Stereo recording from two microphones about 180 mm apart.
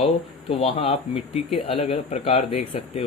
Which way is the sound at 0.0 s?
30° left (ahead or behind).